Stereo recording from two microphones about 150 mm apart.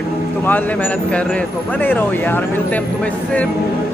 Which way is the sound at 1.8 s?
10° left (ahead or behind).